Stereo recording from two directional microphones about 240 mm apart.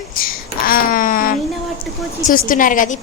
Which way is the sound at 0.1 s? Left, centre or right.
Left.